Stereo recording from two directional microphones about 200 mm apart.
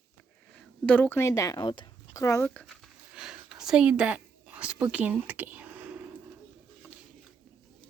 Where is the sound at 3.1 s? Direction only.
5° right (ahead or behind).